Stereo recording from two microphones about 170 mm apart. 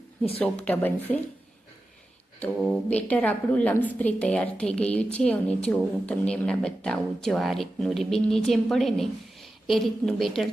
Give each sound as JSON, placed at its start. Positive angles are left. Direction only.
{"t": 0.3, "sound": "speech", "side_deg": 10}
{"t": 2.4, "sound": "a woman's voice", "side_deg": 5}